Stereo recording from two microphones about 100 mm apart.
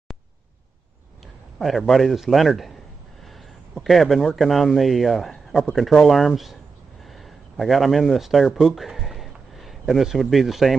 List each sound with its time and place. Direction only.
1.6 s speech: centre (ahead or behind)
3.3 s a sound: centre (ahead or behind)
4.4 s speech: centre (ahead or behind)